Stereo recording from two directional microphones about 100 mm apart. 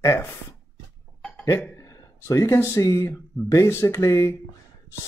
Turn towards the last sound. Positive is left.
turn(degrees=30)  # may be behind; listen again after turning